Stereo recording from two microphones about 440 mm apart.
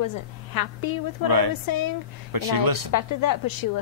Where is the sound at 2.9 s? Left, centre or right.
Left.